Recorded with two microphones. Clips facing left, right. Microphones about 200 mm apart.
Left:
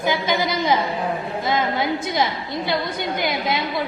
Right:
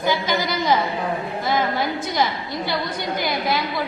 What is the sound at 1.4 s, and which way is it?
A woman's voice, 20° left (ahead or behind).